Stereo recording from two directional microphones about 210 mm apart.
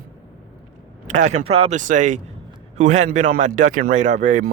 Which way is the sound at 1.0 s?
35° right (ahead or behind).